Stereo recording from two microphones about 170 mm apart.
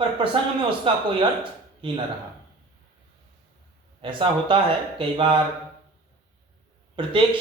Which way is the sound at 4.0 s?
30° right (ahead or behind).